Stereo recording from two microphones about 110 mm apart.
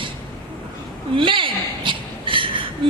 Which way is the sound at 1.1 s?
50° right (ahead or behind).